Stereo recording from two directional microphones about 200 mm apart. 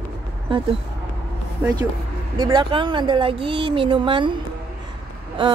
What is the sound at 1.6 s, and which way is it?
Speech, 10° right (ahead or behind).